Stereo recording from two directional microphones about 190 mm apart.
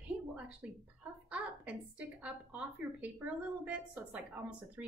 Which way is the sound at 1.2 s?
5° right (ahead or behind).